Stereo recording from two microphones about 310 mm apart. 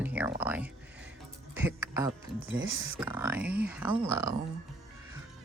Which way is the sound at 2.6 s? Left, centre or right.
Right.